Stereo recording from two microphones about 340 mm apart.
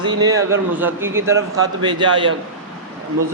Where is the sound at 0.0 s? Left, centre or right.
Centre.